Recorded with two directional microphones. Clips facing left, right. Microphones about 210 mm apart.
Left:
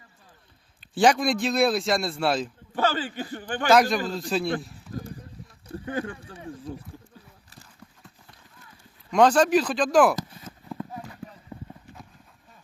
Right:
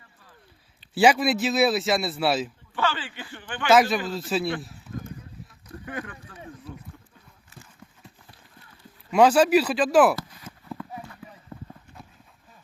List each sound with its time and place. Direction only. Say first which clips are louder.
0.9 s a man's voice: right 1 dB; 5° right (ahead or behind)
2.7 s a man's voice: left 3 dB; 40° left (ahead or behind)
3.7 s a man's voice: even; 5° right (ahead or behind)
5.6 s speech: left 5 dB; 30° left (ahead or behind)
9.0 s speech: right 1 dB; 5° right (ahead or behind)
11.5 s clip-clop: right 1 dB; 10° left (ahead or behind)